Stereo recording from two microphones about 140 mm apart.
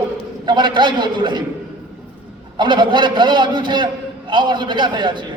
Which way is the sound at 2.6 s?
35° right (ahead or behind).